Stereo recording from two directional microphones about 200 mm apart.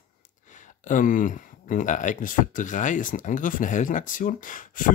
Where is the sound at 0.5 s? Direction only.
40° left (ahead or behind).